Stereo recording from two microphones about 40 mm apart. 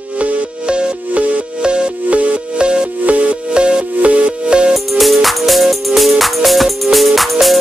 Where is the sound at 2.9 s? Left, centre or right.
Right.